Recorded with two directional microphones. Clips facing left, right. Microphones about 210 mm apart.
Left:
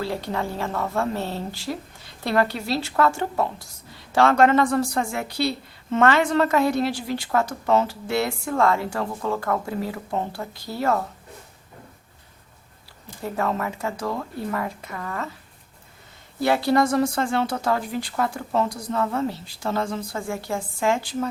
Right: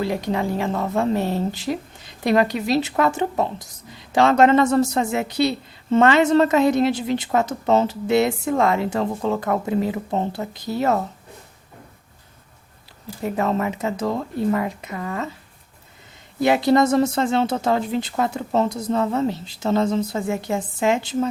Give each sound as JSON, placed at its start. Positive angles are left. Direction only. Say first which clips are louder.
{"t": 0.0, "sound": "speech", "louder": "right 4 dB", "side_deg": -15}
{"t": 13.2, "sound": "speech", "louder": "right 4 dB", "side_deg": -20}
{"t": 16.4, "sound": "speech", "louder": "right 3 dB", "side_deg": -20}